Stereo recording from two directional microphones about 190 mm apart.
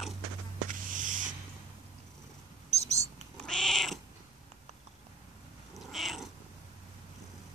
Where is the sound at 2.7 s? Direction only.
35° right (ahead or behind).